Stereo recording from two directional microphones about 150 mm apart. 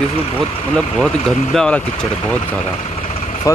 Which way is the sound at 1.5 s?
5° left (ahead or behind).